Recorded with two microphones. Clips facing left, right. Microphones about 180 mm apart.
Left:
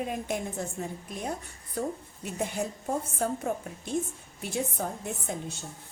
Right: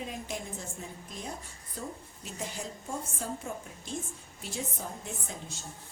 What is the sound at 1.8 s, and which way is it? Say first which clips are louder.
A woman's voice: left 8 dB; 60° left (ahead or behind).